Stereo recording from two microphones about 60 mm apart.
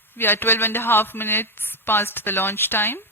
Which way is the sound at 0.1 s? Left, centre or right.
Left.